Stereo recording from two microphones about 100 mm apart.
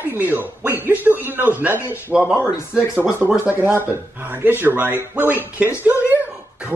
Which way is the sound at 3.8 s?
20° right (ahead or behind).